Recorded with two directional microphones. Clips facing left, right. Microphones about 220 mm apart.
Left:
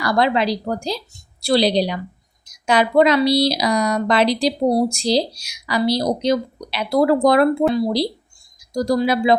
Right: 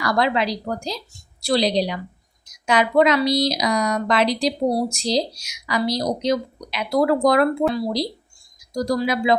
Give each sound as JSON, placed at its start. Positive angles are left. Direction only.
{"t": 0.0, "sound": "a woman's voice", "side_deg": 30}
{"t": 8.7, "sound": "speech", "side_deg": 30}